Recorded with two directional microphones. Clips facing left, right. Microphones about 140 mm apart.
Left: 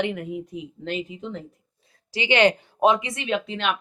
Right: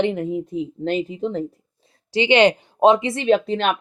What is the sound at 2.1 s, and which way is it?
Speech, 25° right (ahead or behind).